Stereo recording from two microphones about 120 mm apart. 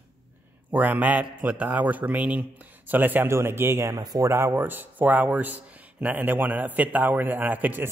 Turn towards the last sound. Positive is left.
turn(degrees=-15)  # may be behind; listen again after turning